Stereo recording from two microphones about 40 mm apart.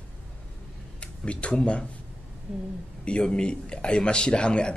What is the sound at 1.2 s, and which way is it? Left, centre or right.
Speech, left.